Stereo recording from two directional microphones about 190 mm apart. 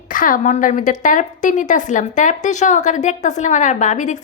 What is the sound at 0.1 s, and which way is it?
A woman's voice, 45° left (ahead or behind).